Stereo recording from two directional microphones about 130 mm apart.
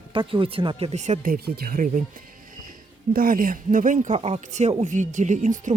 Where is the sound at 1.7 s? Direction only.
90° right.